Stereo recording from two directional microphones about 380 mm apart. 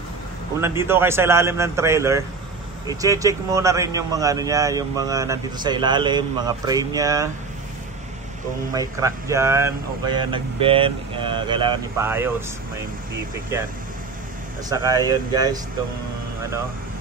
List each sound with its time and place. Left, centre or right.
0.6 s a man's voice: centre
8.7 s a man's voice: centre
14.7 s a man's voice: centre